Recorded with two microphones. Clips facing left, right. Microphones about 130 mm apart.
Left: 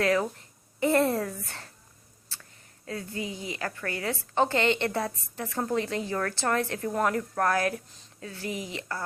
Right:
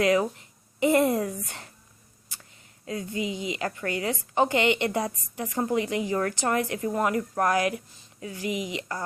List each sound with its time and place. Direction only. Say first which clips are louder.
0.0 s a woman's voice: right 3 dB; 15° right (ahead or behind)
2.3 s a sound: even; 15° right (ahead or behind)
2.8 s a woman's voice: right 4 dB; 15° right (ahead or behind)